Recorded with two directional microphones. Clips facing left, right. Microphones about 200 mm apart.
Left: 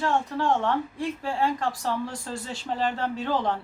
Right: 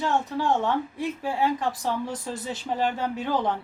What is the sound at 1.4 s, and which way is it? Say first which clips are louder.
A woman's voice: right 1 dB; 20° right (ahead or behind).